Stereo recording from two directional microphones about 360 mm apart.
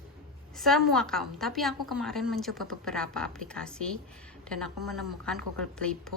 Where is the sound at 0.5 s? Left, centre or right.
Centre.